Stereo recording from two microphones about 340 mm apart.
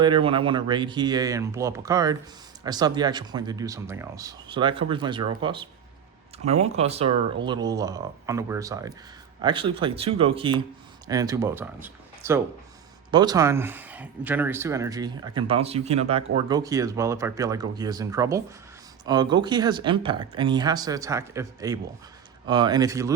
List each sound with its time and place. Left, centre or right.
0.0 s speech: centre